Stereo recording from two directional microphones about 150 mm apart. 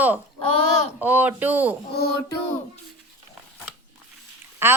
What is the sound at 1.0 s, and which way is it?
Speech, 10° right (ahead or behind).